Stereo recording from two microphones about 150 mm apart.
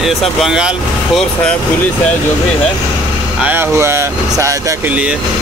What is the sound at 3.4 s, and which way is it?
Speech, 15° right (ahead or behind).